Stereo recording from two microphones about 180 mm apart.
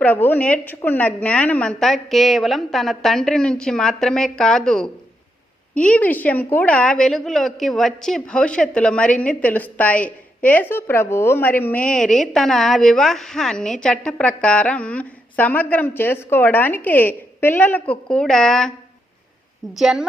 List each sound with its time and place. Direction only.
0.0 s a woman's voice: 10° left (ahead or behind)
19.7 s a woman's voice: centre (ahead or behind)